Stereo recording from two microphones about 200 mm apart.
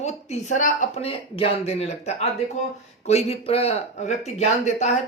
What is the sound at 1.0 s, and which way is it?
Speech, 30° left (ahead or behind).